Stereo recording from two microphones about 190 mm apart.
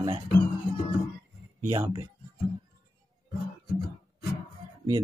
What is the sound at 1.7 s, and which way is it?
Speech, 15° right (ahead or behind).